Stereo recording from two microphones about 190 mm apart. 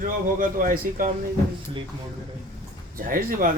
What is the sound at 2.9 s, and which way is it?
Speech, 45° right (ahead or behind).